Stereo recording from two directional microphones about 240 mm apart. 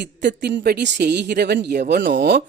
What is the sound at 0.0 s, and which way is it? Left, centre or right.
Speech, right.